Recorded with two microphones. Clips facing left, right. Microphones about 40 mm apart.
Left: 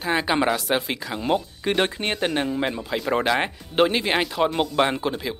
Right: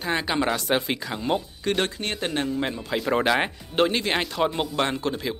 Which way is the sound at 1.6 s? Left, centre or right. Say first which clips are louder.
Left 3 dB; centre.